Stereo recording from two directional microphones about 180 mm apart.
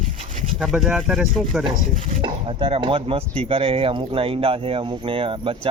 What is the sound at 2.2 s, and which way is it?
Speech, 30° right (ahead or behind).